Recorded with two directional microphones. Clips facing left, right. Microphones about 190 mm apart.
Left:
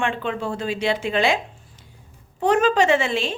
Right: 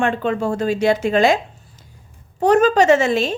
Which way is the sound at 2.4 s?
40° right (ahead or behind).